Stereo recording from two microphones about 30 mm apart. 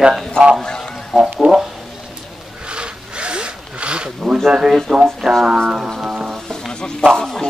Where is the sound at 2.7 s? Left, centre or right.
Right.